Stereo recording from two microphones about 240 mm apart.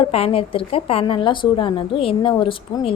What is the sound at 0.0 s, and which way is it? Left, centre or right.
A woman's voice, left.